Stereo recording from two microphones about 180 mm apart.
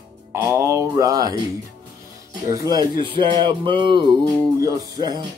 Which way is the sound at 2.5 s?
20° right (ahead or behind).